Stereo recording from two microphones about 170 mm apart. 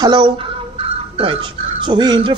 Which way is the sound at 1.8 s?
25° right (ahead or behind).